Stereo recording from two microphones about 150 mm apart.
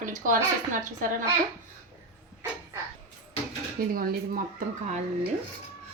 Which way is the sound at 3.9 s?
70° right (ahead or behind).